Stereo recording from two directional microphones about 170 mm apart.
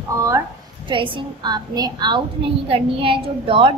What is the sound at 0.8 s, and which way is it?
A woman's voice, 30° right (ahead or behind).